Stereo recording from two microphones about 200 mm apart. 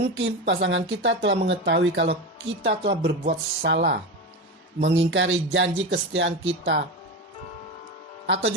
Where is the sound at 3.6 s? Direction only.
60° right (ahead or behind).